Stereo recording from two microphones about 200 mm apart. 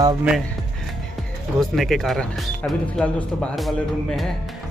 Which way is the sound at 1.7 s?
Centre (ahead or behind).